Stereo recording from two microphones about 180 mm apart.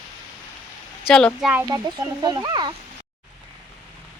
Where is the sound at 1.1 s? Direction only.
5° left (ahead or behind).